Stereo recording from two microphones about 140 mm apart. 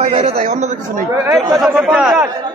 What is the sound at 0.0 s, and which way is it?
Speech, 50° right (ahead or behind).